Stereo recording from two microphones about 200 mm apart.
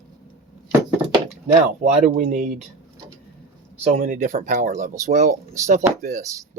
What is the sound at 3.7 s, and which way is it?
Speech, 35° right (ahead or behind).